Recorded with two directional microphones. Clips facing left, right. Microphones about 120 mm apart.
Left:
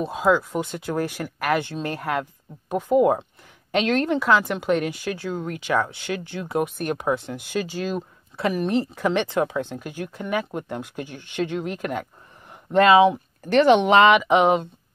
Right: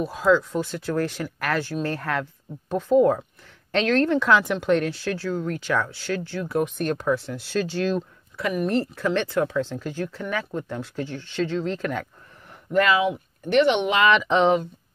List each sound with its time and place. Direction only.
0.0 s speech: 20° left (ahead or behind)
8.4 s speech: 30° left (ahead or behind)
8.9 s speech: 15° left (ahead or behind)
12.7 s speech: 25° left (ahead or behind)
14.1 s speech: 10° left (ahead or behind)